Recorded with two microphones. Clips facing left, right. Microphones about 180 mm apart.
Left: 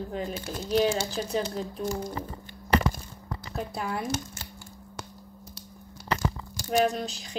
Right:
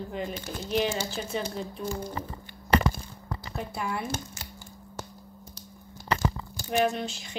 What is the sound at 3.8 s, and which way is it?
Speech, 40° left (ahead or behind).